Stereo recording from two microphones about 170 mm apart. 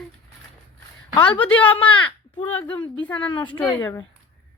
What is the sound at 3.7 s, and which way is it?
Speech, 20° left (ahead or behind).